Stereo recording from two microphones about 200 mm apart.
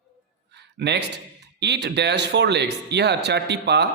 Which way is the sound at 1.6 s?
55° right (ahead or behind).